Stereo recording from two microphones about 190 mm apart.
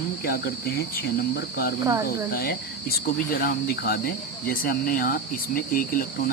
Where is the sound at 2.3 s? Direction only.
55° left (ahead or behind).